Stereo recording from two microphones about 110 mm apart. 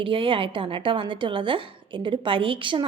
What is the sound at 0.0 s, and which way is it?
A woman's voice, 50° right (ahead or behind).